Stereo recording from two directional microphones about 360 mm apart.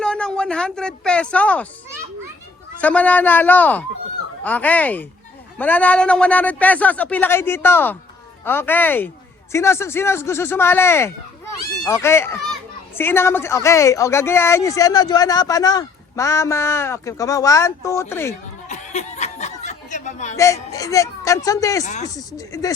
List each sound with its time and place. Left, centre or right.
0.0 s speech: centre
2.8 s a man's voice: centre
18.7 s a sound: centre
20.3 s speech: centre
21.8 s speech: centre
22.1 s speech: centre